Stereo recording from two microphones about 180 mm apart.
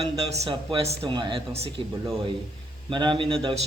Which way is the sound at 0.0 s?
35° right (ahead or behind).